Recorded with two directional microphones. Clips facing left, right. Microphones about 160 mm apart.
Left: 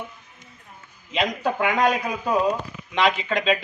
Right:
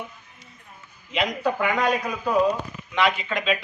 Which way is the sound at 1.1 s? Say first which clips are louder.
Even; 30° left (ahead or behind).